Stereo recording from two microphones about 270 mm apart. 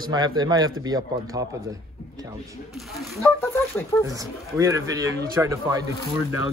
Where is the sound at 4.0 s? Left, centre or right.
Centre.